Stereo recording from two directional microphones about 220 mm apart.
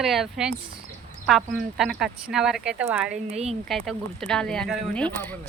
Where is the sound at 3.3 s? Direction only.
30° right (ahead or behind).